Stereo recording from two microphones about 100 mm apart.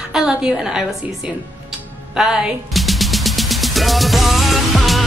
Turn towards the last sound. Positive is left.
turn(degrees=0)  # may be behind; listen again after turning